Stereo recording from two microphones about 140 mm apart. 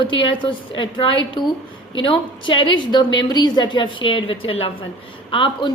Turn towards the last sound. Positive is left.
turn(degrees=35)  # may be behind; listen again after turning